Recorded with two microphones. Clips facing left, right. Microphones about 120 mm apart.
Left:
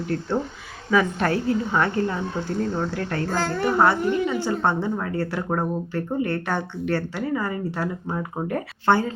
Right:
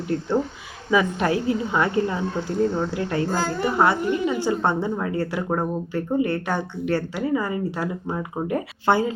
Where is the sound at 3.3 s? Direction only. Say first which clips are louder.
Even; 5° right (ahead or behind).